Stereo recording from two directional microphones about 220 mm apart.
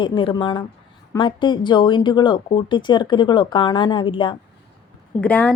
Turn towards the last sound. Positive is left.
turn(degrees=5)  # may be behind; listen again after turning